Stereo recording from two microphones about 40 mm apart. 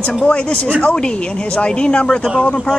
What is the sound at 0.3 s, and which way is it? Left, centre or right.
Speech, left.